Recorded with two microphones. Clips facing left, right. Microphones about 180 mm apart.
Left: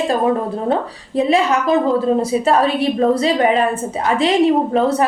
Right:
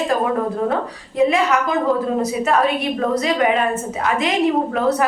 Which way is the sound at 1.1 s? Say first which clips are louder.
Left 1 dB; 30° left (ahead or behind).